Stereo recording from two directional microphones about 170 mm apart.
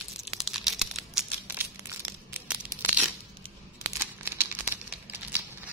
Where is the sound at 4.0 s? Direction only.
15° right (ahead or behind).